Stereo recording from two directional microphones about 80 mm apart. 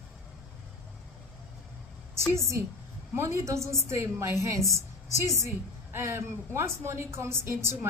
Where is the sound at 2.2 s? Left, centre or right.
Right.